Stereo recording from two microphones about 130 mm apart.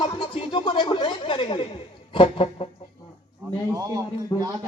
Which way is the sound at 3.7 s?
25° right (ahead or behind).